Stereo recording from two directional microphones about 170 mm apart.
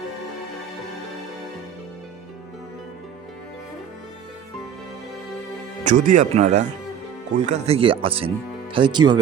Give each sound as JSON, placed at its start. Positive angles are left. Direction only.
{"t": 5.8, "sound": "speech", "side_deg": -50}